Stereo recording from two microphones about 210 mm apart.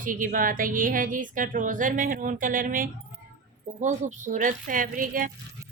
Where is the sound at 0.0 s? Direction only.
40° right (ahead or behind).